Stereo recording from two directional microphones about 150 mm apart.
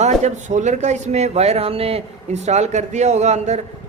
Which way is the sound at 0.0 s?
50° right (ahead or behind).